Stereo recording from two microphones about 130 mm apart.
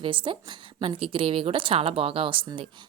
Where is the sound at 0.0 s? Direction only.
40° right (ahead or behind).